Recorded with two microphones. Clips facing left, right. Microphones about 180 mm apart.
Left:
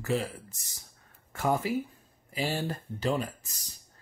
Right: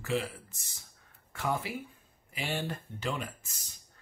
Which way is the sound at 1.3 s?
45° left (ahead or behind).